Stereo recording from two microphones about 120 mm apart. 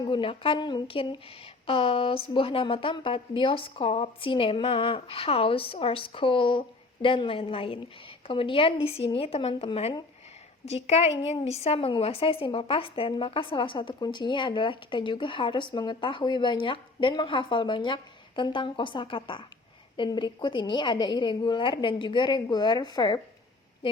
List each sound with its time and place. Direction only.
0.0 s a woman's voice: 45° left (ahead or behind)